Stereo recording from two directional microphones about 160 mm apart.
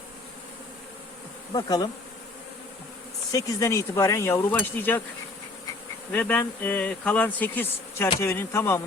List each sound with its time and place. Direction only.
1.5 s bee: 25° left (ahead or behind)
3.3 s speech: 20° left (ahead or behind)
6.1 s speech: 10° left (ahead or behind)